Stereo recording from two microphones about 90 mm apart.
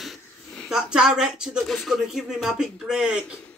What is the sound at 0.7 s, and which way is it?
Speech, 5° right (ahead or behind).